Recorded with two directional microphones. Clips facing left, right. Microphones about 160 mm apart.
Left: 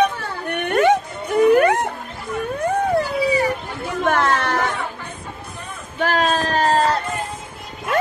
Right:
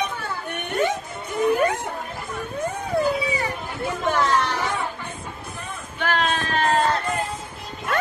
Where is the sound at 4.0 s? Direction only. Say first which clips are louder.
Left 3 dB; 55° left (ahead or behind).